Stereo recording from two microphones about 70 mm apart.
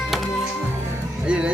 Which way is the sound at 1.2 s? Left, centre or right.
Centre.